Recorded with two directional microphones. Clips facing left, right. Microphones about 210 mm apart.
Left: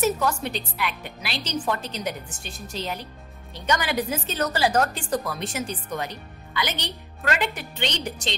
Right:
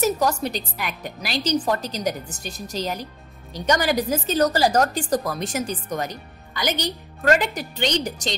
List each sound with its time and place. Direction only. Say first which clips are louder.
0.0 s a woman's voice: right 2 dB; 40° right (ahead or behind)